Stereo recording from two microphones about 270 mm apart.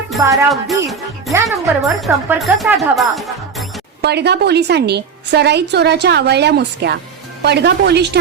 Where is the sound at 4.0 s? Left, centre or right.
Right.